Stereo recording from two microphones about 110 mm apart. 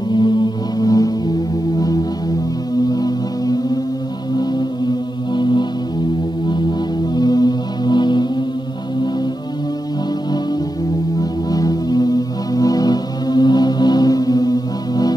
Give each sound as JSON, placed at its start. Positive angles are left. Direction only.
{"t": 0.1, "sound": "music", "side_deg": 40}
{"t": 11.1, "sound": "music", "side_deg": 35}